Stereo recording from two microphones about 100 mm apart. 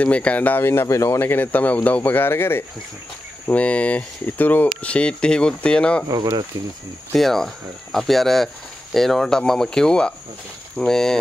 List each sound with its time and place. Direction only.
0.0 s speech: 15° left (ahead or behind)
7.1 s speech: 5° left (ahead or behind)